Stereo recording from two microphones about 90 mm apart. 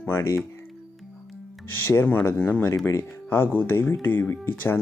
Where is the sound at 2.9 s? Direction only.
30° left (ahead or behind).